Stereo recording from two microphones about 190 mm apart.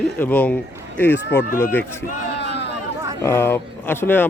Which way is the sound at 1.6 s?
10° left (ahead or behind).